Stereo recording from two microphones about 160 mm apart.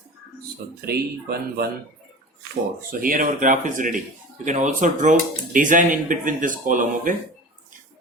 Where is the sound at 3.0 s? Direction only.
60° right (ahead or behind).